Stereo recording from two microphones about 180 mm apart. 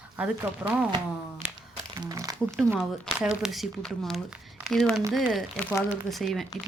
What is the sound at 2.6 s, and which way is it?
Speech, centre (ahead or behind).